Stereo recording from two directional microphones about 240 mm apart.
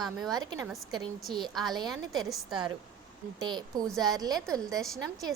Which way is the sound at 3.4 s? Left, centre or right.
Centre.